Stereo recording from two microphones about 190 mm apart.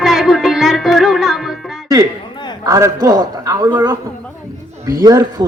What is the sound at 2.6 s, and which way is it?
A man's voice, 15° right (ahead or behind).